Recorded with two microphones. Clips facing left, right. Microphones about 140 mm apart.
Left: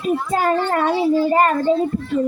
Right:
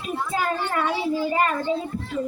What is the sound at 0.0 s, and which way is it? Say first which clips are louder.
A child's voice: left 7 dB; 45° left (ahead or behind).